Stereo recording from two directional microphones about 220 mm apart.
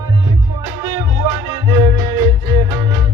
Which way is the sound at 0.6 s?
15° right (ahead or behind).